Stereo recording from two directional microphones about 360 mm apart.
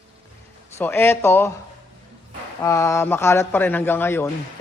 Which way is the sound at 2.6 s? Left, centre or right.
Centre.